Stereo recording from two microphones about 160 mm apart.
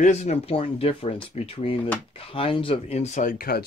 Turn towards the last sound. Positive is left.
turn(degrees=65)  # may be behind; listen again after turning